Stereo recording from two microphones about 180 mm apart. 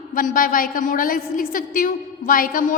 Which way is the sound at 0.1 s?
50° left (ahead or behind).